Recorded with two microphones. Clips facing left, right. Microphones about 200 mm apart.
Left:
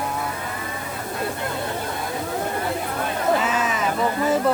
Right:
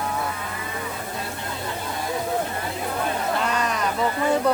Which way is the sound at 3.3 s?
5° left (ahead or behind).